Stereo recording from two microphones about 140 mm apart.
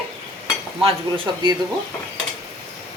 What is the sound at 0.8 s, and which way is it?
Speech, 40° right (ahead or behind).